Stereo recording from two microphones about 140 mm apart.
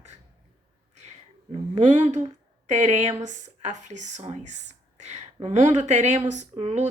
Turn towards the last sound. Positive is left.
turn(degrees=-50)  # may be behind; listen again after turning